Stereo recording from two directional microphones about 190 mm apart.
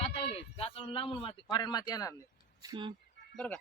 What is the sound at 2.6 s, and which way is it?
Speech, 20° right (ahead or behind).